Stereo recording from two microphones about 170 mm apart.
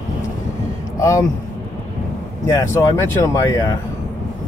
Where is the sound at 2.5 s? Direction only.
15° left (ahead or behind).